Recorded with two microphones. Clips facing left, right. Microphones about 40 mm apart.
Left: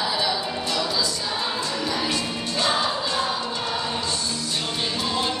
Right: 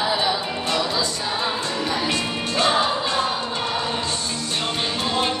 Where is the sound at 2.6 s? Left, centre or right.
Right.